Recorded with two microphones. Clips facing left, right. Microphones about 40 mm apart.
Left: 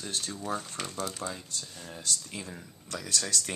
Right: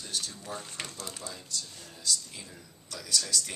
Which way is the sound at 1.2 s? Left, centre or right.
Left.